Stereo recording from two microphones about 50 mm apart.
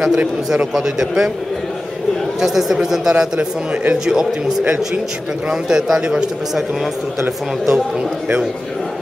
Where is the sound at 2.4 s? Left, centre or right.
Centre.